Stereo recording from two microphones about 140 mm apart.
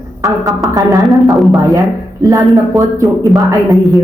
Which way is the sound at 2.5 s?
Centre (ahead or behind).